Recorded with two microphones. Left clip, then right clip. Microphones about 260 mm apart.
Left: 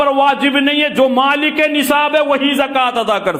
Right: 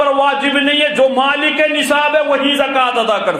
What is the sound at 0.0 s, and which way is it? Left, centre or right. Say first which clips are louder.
A man's voice: left 1 dB; left.